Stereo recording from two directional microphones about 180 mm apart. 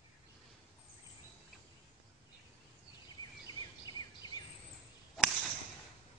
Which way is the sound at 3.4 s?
25° left (ahead or behind).